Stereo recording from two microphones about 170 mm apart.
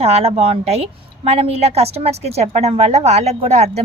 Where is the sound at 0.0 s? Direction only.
35° right (ahead or behind).